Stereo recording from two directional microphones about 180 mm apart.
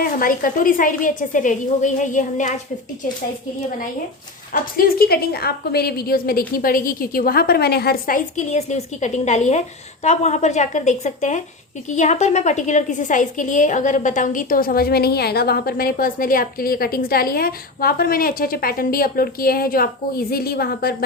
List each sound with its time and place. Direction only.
0.0 s a woman's voice: 50° left (ahead or behind)
4.8 s a woman's voice: 55° left (ahead or behind)